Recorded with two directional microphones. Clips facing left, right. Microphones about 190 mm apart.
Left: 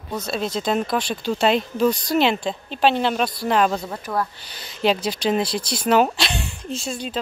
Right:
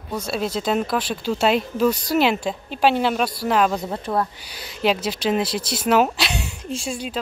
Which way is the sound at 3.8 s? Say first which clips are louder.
Right 2 dB; 25° right (ahead or behind).